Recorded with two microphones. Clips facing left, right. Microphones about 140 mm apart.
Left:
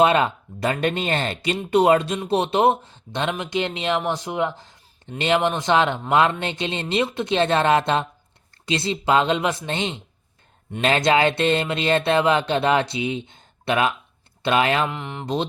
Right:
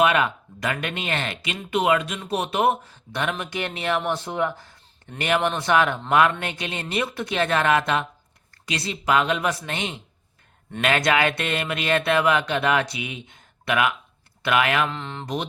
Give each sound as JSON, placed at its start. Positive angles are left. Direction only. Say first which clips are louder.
{"t": 0.0, "sound": "speech", "louder": "left 3 dB", "side_deg": 30}
{"t": 14.8, "sound": "speech", "louder": "left 2 dB", "side_deg": 15}